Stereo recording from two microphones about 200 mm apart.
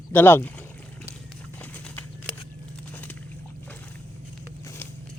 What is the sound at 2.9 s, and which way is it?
Boat, 10° left (ahead or behind).